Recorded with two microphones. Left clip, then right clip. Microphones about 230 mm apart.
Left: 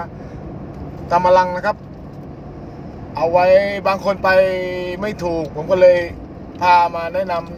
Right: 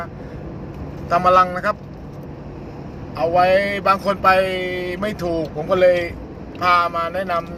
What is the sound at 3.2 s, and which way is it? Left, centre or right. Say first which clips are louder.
Speech: left 3 dB; centre.